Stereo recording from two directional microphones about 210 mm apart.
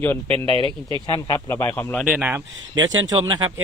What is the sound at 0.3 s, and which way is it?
Speech, 25° right (ahead or behind).